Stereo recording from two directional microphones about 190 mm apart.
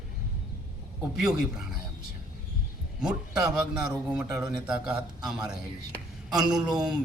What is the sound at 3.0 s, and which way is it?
A man's voice, 5° right (ahead or behind).